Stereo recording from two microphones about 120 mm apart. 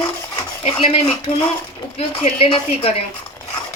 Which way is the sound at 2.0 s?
55° left (ahead or behind).